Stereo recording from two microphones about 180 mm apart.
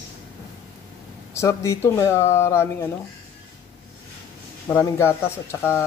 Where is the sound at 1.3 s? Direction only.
15° left (ahead or behind).